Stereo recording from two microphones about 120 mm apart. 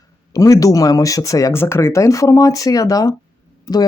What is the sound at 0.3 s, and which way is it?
Speech, 30° left (ahead or behind).